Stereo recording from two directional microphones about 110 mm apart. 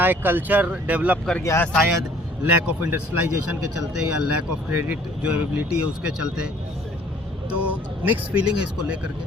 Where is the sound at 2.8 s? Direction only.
15° right (ahead or behind).